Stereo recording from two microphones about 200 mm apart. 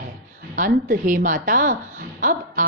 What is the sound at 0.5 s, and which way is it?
A woman's voice, 40° right (ahead or behind).